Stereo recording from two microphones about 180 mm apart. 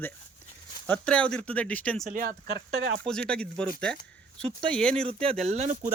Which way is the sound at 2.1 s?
50° right (ahead or behind).